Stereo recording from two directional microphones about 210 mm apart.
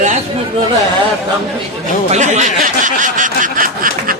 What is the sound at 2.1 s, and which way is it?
Speech, 35° right (ahead or behind).